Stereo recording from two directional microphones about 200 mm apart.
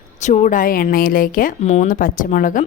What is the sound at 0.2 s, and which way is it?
A woman's voice, 35° left (ahead or behind).